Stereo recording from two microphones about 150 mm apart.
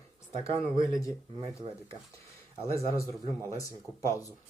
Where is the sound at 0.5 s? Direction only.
20° left (ahead or behind).